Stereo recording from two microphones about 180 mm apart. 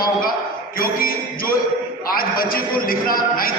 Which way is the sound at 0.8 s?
55° left (ahead or behind).